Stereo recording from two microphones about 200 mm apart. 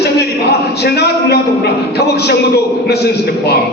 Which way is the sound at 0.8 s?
55° left (ahead or behind).